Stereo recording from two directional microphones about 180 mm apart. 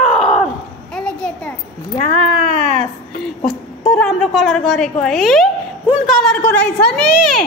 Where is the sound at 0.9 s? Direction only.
5° left (ahead or behind).